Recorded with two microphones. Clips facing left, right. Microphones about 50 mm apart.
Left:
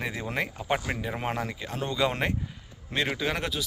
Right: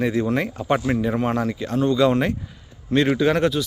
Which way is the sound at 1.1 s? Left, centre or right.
Centre.